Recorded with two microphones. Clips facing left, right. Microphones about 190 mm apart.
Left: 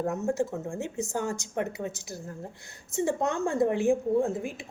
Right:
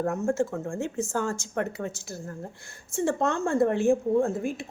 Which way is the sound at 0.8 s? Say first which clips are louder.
Right 3 dB; 20° left (ahead or behind).